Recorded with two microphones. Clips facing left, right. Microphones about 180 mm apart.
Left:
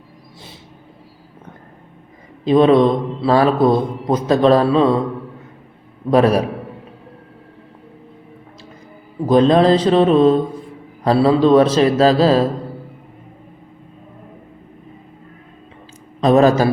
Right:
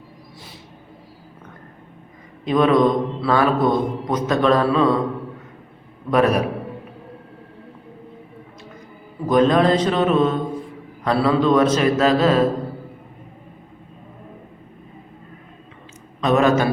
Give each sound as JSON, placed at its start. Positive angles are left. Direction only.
{"t": 2.4, "sound": "speech", "side_deg": 30}
{"t": 6.1, "sound": "a man's voice", "side_deg": 30}
{"t": 9.2, "sound": "a man's voice", "side_deg": 30}
{"t": 16.2, "sound": "a man's voice", "side_deg": 35}